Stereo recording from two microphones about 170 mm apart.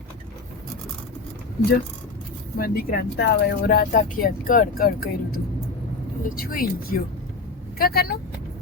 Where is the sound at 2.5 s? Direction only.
60° left (ahead or behind).